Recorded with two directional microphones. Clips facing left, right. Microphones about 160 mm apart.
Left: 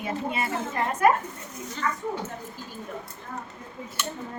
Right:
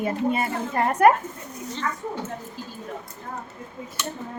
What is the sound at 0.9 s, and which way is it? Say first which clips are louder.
Speech: right 4 dB; 65° right (ahead or behind).